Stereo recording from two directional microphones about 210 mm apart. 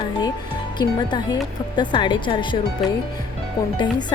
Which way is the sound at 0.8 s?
20° left (ahead or behind).